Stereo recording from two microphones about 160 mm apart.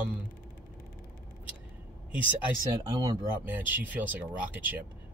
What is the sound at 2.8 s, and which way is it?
Speech, 25° right (ahead or behind).